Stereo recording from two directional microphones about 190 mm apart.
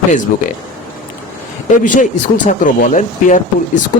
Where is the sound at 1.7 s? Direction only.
40° left (ahead or behind).